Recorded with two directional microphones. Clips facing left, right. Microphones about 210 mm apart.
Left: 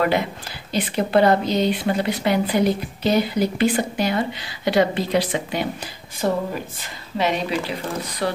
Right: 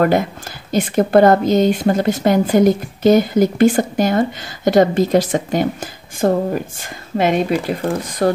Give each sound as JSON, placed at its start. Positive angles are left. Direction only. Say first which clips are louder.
{"t": 0.0, "sound": "speech", "louder": "right 5 dB", "side_deg": -45}